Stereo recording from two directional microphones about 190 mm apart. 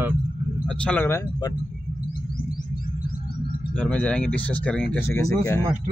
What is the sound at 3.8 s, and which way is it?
Speech, 5° left (ahead or behind).